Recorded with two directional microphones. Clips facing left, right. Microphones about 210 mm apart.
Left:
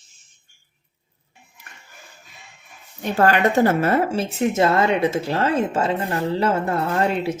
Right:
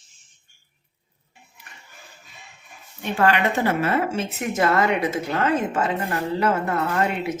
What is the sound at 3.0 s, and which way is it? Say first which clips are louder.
Speech: left 3 dB; 40° left (ahead or behind).